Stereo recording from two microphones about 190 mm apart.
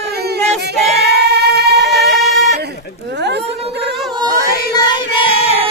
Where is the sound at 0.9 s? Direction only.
60° right (ahead or behind).